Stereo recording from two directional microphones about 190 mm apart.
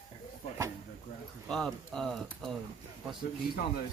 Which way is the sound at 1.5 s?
Centre (ahead or behind).